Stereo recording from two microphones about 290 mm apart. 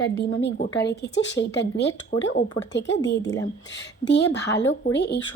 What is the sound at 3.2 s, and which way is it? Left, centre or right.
Speech, centre.